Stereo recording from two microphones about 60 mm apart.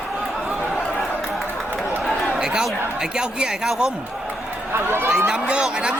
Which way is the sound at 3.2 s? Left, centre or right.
Centre.